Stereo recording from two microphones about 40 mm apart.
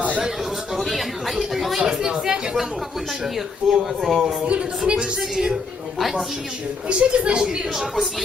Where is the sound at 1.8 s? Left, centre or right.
Centre.